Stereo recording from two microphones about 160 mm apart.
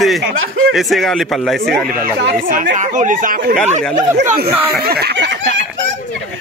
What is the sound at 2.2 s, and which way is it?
Speech, 60° right (ahead or behind).